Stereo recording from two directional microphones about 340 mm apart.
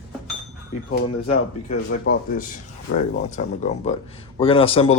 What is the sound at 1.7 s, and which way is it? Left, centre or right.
Speech, left.